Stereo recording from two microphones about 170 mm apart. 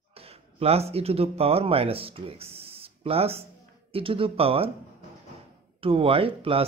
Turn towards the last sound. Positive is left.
turn(degrees=-35)  # may be behind; listen again after turning